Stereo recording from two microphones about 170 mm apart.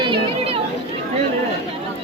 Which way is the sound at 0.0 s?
30° right (ahead or behind).